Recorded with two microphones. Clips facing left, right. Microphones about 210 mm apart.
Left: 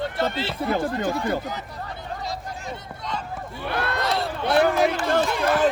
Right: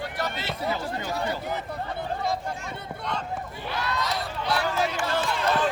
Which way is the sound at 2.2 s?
55° right (ahead or behind).